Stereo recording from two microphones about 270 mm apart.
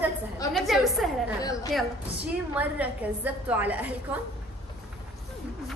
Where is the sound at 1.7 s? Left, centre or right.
Centre.